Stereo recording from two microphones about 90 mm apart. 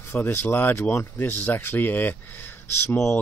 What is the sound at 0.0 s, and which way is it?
Speech, 25° left (ahead or behind).